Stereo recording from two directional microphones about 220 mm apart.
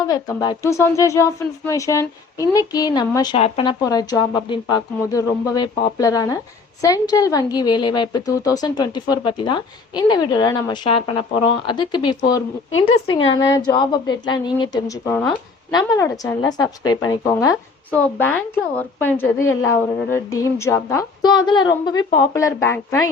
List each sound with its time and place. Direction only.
0.1 s a woman's voice: 15° left (ahead or behind)